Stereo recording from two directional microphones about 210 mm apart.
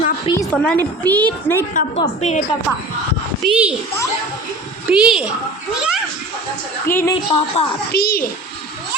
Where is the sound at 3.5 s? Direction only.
5° right (ahead or behind).